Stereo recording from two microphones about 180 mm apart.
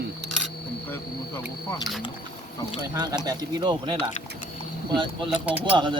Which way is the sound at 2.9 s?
20° right (ahead or behind).